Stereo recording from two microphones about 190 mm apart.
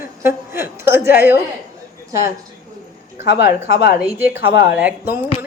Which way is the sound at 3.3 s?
55° left (ahead or behind).